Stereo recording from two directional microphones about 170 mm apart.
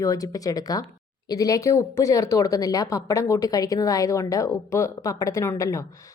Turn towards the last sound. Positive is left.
turn(degrees=15)  # may be behind; listen again after turning